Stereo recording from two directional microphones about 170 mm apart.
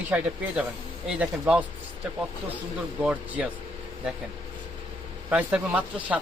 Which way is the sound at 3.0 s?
5° right (ahead or behind).